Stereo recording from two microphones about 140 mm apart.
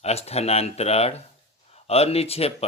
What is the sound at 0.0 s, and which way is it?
Speech, 50° left (ahead or behind).